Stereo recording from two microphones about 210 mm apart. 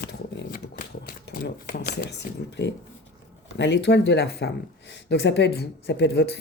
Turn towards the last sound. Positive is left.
turn(degrees=50)  # may be behind; listen again after turning